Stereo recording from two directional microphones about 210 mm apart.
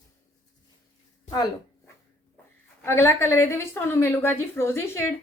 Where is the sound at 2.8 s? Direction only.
10° left (ahead or behind).